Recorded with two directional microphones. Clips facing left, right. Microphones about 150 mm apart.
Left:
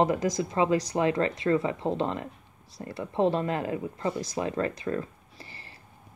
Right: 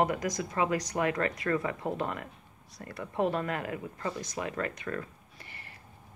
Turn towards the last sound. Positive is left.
turn(degrees=30)  # may be behind; listen again after turning